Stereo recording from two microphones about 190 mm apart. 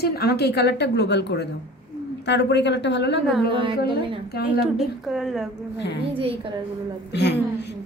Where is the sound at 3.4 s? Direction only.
25° right (ahead or behind).